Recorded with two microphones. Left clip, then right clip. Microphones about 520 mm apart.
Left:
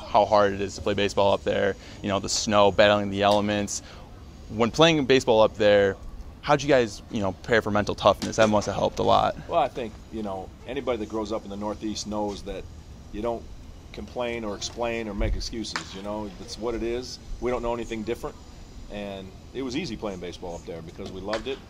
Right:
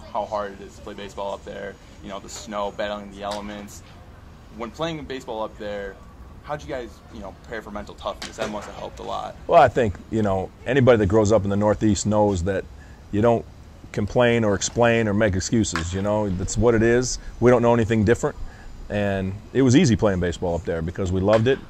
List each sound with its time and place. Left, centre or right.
0.1 s speech: left
9.5 s speech: right